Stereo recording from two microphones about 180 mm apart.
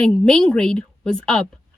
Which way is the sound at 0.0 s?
5° left (ahead or behind).